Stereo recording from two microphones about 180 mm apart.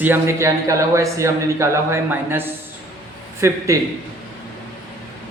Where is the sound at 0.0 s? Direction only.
15° right (ahead or behind).